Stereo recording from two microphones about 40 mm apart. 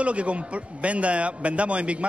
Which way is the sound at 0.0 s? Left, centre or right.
Right.